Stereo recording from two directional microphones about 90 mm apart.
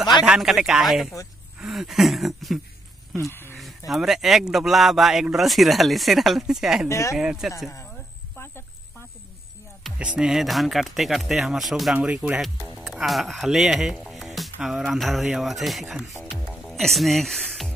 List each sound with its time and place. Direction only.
0.2 s speech: 5° right (ahead or behind)
3.3 s speech: 25° left (ahead or behind)
3.5 s speech: centre (ahead or behind)
6.9 s speech: 35° left (ahead or behind)
7.2 s speech: 5° right (ahead or behind)
9.9 s speech: 10° right (ahead or behind)